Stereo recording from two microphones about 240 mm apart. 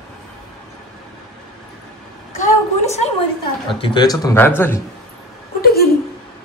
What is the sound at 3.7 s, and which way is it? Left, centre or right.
A man's voice, left.